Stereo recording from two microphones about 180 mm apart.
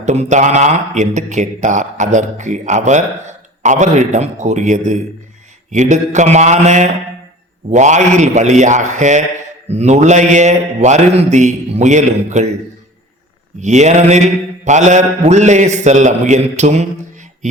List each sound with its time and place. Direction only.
0.0 s speech: 40° right (ahead or behind)
13.6 s speech: 40° right (ahead or behind)